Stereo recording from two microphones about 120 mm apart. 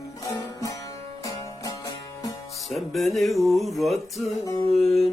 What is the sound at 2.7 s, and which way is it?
Music, centre (ahead or behind).